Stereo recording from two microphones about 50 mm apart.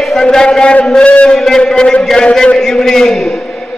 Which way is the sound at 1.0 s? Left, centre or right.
Left.